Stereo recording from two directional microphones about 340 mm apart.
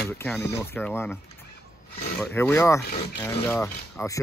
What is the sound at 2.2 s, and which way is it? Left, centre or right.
Speech, centre.